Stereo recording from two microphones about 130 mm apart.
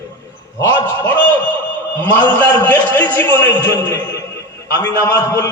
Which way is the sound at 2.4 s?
10° left (ahead or behind).